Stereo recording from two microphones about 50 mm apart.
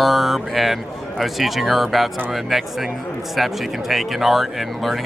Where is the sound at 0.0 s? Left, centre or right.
Centre.